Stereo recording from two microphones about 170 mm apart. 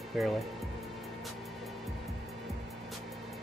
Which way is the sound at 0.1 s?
Centre (ahead or behind).